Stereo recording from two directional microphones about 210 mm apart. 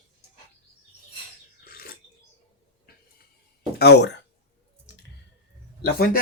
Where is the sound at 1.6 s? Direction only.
45° left (ahead or behind).